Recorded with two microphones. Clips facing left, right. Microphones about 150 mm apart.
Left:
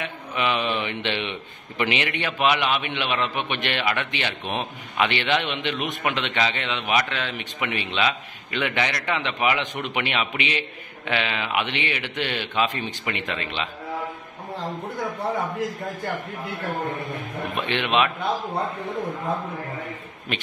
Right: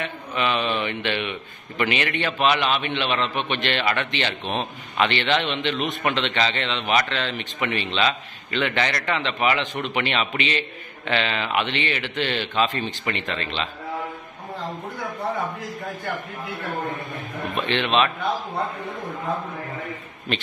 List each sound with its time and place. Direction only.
0.0 s a man's voice: 15° left (ahead or behind)
17.6 s a man's voice: 10° left (ahead or behind)